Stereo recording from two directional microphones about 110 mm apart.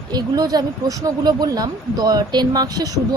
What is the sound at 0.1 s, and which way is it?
Speech, 35° right (ahead or behind).